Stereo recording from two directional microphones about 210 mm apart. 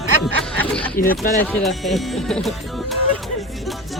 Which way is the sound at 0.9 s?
45° left (ahead or behind).